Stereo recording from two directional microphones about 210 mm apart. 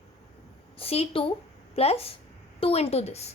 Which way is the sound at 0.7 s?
30° left (ahead or behind).